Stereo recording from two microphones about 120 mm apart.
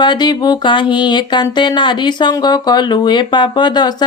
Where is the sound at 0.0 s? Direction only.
40° left (ahead or behind).